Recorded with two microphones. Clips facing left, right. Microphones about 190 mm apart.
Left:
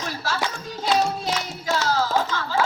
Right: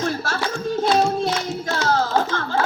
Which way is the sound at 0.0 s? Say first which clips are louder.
Right 4 dB; 50° right (ahead or behind).